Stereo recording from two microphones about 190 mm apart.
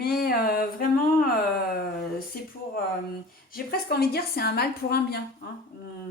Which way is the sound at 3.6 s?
55° left (ahead or behind).